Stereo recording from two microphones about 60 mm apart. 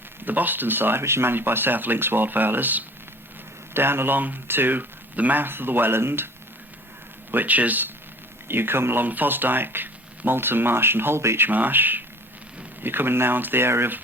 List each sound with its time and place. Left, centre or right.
0.3 s speech: right
7.3 s speech: right
11.4 s speech: right